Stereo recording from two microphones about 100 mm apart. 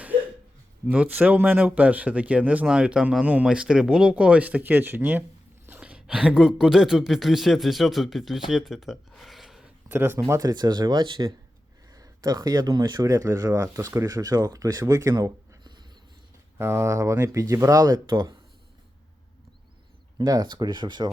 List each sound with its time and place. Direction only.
0.9 s speech: 15° right (ahead or behind); by 9.6 s centre (ahead or behind)
9.9 s speech: 20° right (ahead or behind)
10.5 s speech: 45° right (ahead or behind)
15.1 s a sound: 45° right (ahead or behind)
16.6 s speech: 25° right (ahead or behind)
18.1 s speech: 50° right (ahead or behind)
20.1 s speech: 45° right (ahead or behind)